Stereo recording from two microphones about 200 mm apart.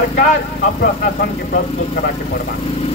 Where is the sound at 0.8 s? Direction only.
45° left (ahead or behind).